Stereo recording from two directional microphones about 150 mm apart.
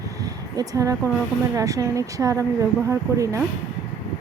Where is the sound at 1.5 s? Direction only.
20° right (ahead or behind).